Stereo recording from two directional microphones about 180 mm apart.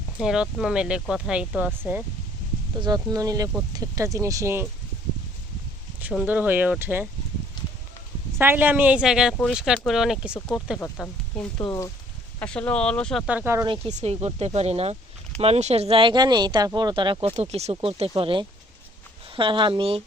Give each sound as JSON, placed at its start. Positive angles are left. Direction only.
{"t": 0.2, "sound": "speech", "side_deg": -5}
{"t": 2.8, "sound": "speech", "side_deg": -20}
{"t": 6.0, "sound": "speech", "side_deg": -10}
{"t": 8.4, "sound": "speech", "side_deg": -10}
{"t": 13.2, "sound": "speech", "side_deg": -10}
{"t": 13.7, "sound": "speech", "side_deg": -35}